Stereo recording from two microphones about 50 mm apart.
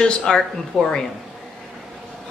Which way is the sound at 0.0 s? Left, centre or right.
Centre.